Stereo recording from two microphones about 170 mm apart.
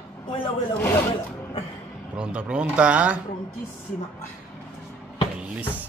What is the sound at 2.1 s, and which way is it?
Speech, 5° right (ahead or behind).